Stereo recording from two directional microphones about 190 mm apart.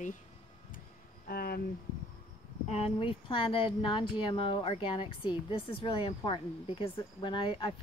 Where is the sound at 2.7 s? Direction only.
30° left (ahead or behind).